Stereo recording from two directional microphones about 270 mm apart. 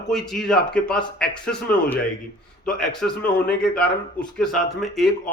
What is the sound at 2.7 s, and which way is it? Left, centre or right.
A man's voice, centre.